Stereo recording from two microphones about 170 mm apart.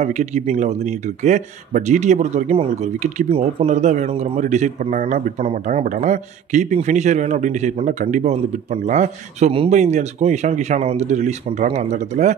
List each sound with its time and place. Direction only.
0.0 s speech: 45° right (ahead or behind)